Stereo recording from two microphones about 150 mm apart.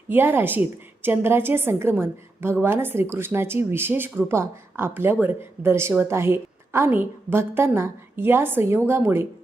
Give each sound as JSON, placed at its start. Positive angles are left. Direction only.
{"t": 0.1, "sound": "a woman's voice", "side_deg": -15}